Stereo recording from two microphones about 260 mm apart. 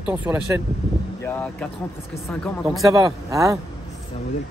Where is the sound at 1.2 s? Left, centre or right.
Centre.